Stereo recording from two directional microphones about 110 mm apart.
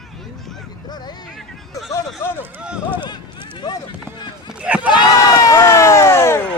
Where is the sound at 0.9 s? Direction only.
40° left (ahead or behind).